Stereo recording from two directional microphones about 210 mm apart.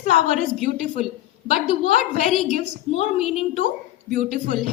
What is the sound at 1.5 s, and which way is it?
A woman's voice, 30° left (ahead or behind).